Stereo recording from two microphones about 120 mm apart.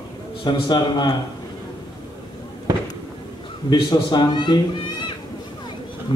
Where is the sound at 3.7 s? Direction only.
35° left (ahead or behind).